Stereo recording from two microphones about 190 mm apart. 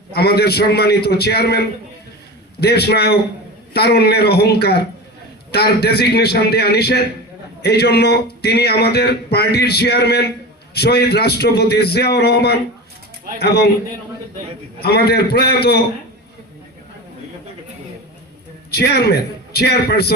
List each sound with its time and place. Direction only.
0.1 s a man's voice: 55° left (ahead or behind)
14.8 s a man's voice: 55° left (ahead or behind)
18.8 s a man's voice: 55° left (ahead or behind)